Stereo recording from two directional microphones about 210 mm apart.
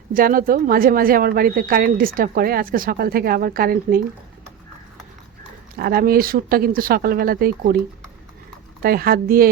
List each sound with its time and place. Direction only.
0.1 s speech: 40° right (ahead or behind)
5.8 s speech: 45° right (ahead or behind)
8.8 s speech: 45° right (ahead or behind)